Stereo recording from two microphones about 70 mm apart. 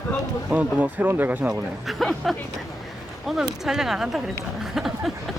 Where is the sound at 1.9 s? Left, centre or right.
Centre.